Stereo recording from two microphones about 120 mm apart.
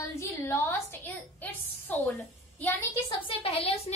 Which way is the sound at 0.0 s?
20° left (ahead or behind).